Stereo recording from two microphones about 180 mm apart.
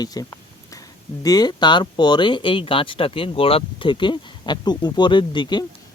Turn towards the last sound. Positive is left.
turn(degrees=25)  # may be behind; listen again after turning